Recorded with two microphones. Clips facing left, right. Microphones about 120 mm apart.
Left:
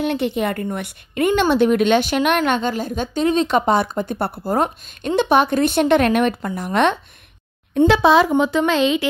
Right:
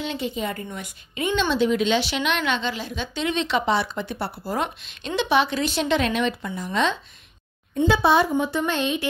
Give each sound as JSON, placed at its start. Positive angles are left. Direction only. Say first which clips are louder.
{"t": 0.0, "sound": "a woman's voice", "louder": "left 7 dB", "side_deg": 60}
{"t": 7.7, "sound": "speech", "louder": "left 5 dB", "side_deg": 90}